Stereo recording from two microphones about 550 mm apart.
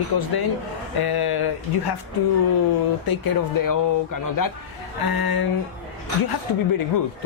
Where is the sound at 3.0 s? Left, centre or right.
Left.